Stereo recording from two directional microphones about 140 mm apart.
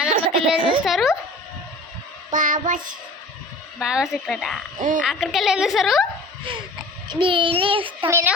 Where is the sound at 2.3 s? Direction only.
70° right (ahead or behind).